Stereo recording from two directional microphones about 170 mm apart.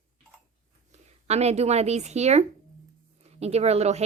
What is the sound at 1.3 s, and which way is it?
Speech, 40° right (ahead or behind).